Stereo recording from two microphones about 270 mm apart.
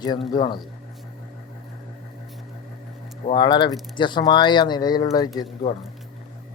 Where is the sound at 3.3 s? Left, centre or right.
Centre.